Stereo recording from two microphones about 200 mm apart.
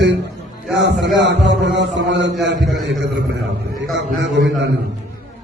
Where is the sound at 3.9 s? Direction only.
65° right (ahead or behind).